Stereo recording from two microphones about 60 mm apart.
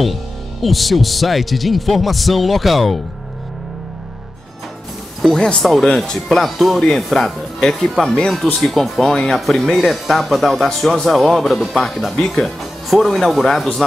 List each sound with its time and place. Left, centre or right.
0.0 s speech: centre
5.2 s speech: centre
8.0 s speech: centre
8.5 s speech: centre
9.0 s speech: centre